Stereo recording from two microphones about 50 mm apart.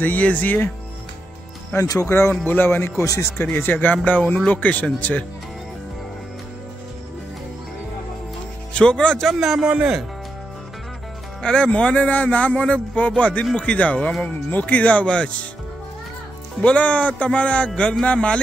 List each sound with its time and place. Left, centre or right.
0.0 s speech: left
1.8 s speech: left
2.4 s speech: left
8.7 s a man's voice: centre
9.2 s a man's voice: centre
9.6 s speech: centre
11.4 s a man's voice: centre
16.6 s a man's voice: left